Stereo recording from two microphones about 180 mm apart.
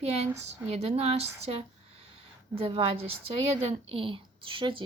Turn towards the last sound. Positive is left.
turn(degrees=-30)  # may be behind; listen again after turning